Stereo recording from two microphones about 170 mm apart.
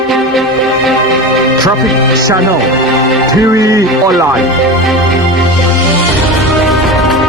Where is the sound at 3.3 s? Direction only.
20° right (ahead or behind).